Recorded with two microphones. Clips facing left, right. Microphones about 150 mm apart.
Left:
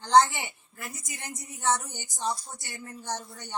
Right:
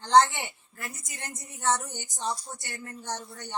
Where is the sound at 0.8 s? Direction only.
15° left (ahead or behind).